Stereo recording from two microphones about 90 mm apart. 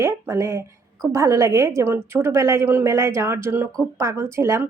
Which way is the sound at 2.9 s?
35° right (ahead or behind).